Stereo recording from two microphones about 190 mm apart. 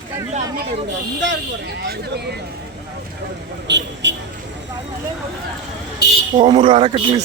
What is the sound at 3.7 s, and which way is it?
Speech, 70° right (ahead or behind).